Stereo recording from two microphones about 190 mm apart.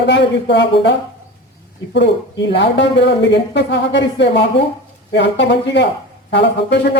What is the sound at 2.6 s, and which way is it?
Speech, 70° left (ahead or behind).